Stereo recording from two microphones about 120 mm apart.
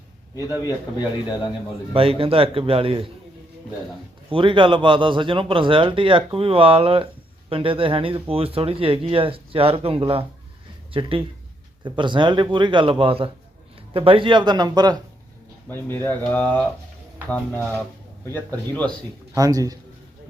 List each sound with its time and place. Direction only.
1.9 s speech: 50° right (ahead or behind)
4.3 s a man's voice: 45° right (ahead or behind)
15.7 s speech: 15° left (ahead or behind)
19.3 s a man's voice: 30° right (ahead or behind)